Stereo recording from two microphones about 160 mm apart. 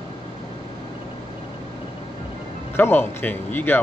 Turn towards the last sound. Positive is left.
turn(degrees=10)  # may be behind; listen again after turning